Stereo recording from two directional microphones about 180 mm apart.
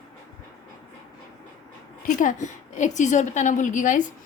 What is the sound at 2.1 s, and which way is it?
A woman's voice, 45° left (ahead or behind).